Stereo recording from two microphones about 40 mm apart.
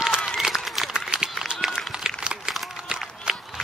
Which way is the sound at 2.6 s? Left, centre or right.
Centre.